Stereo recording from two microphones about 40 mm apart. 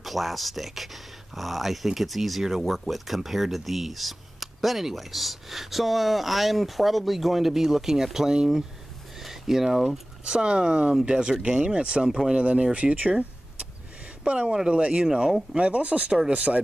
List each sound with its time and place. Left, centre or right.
0.0 s speech: centre; by 12.6 s right
14.2 s speech: right
14.8 s speech: right
15.0 s speech: centre
15.5 s speech: right